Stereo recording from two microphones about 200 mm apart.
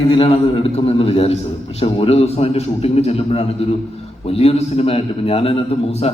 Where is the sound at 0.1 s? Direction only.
30° left (ahead or behind).